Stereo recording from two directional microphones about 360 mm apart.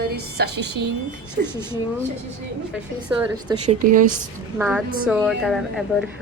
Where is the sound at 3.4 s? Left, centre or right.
Centre.